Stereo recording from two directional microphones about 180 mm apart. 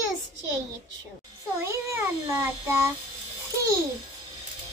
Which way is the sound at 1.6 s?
15° right (ahead or behind).